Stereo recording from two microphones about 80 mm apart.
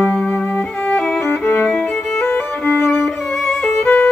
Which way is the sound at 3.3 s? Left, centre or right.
Centre.